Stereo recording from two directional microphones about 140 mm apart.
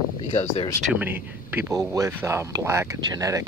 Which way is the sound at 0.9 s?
15° right (ahead or behind).